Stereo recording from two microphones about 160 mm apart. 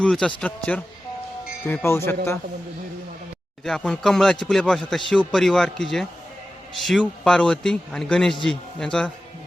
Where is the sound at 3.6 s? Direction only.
5° left (ahead or behind).